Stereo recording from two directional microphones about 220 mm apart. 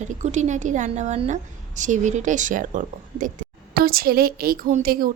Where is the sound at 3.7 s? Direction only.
45° right (ahead or behind).